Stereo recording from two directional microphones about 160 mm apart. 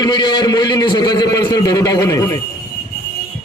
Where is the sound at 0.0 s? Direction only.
25° left (ahead or behind).